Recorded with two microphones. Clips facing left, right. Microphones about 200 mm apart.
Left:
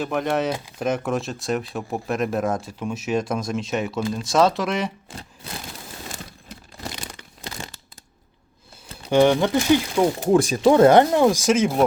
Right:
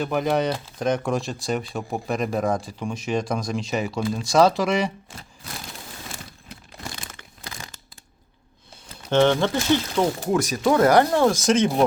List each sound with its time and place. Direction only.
0.0 s speech: centre (ahead or behind)
7.1 s crumpling: 25° left (ahead or behind)
9.0 s speech: 15° left (ahead or behind)
10.3 s speech: 30° left (ahead or behind); by 11.8 s 5° left (ahead or behind)